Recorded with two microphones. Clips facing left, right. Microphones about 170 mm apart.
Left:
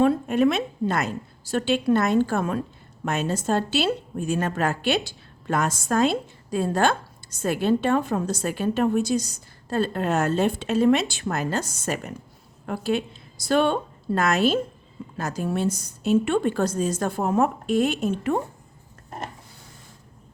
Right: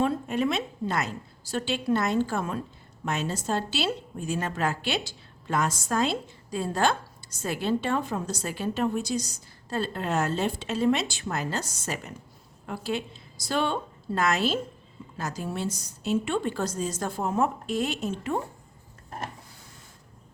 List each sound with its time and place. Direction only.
0.0 s a woman's voice: 55° left (ahead or behind)